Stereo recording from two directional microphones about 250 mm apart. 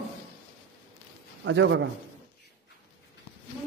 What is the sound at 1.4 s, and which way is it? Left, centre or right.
Speech, right.